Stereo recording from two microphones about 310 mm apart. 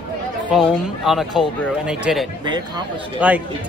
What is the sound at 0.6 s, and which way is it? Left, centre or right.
Speech, centre.